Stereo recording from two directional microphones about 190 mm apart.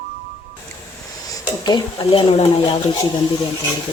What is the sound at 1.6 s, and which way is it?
Speech, 25° left (ahead or behind).